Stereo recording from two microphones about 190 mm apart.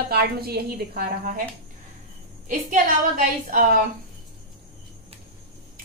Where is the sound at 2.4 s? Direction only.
45° right (ahead or behind).